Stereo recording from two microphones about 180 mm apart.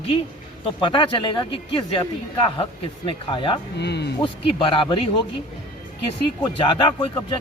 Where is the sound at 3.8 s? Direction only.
70° left (ahead or behind).